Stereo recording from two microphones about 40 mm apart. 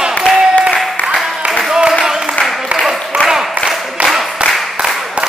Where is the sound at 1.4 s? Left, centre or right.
Right.